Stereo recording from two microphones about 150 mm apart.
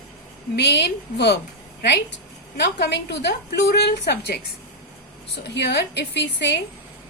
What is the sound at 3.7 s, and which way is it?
Speech, 90° left.